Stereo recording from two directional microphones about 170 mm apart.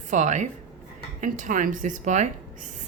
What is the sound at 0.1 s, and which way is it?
Speech, 45° right (ahead or behind).